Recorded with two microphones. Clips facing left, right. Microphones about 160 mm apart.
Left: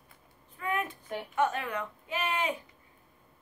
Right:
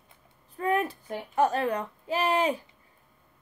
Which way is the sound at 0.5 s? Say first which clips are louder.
Right 7 dB; 35° right (ahead or behind).